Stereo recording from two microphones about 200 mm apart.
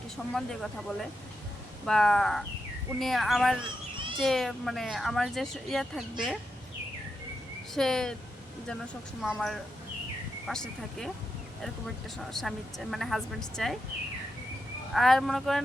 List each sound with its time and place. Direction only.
0.3 s speech: centre (ahead or behind)
3.9 s a sound: 25° right (ahead or behind)
4.2 s speech: centre (ahead or behind)
7.7 s speech: centre (ahead or behind)
12.2 s speech: centre (ahead or behind)
14.9 s speech: centre (ahead or behind)